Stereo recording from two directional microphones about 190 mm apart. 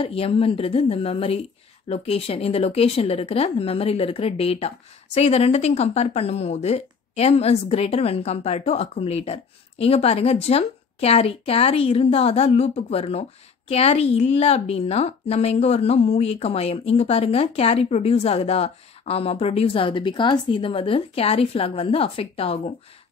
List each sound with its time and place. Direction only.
0.0 s speech: 30° left (ahead or behind)